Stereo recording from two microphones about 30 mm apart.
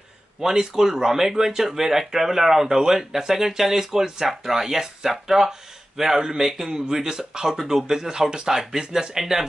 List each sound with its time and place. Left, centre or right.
0.4 s speech: centre